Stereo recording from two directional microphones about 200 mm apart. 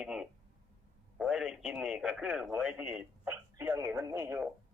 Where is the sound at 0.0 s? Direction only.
5° right (ahead or behind).